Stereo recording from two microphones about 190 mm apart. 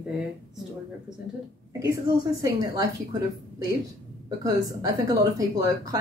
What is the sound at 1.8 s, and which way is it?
A woman's voice, 15° right (ahead or behind).